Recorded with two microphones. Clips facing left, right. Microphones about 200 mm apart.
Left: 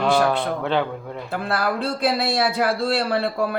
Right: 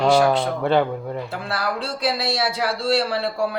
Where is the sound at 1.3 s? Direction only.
55° left (ahead or behind).